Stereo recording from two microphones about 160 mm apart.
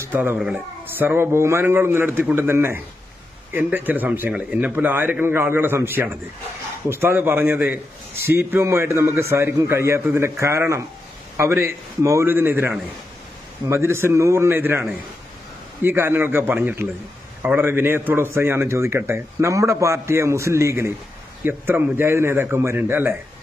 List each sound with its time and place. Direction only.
0.0 s a man's voice: 15° right (ahead or behind)